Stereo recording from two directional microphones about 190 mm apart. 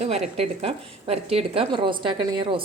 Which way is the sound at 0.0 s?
30° right (ahead or behind).